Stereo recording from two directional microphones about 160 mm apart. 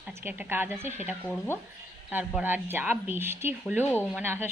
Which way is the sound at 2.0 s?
10° right (ahead or behind).